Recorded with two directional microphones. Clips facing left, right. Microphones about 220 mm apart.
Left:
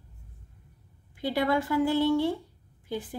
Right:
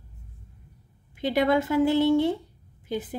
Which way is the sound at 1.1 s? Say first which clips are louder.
Right 4 dB; 20° right (ahead or behind).